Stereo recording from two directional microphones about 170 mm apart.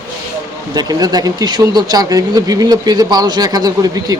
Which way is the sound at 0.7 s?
25° right (ahead or behind).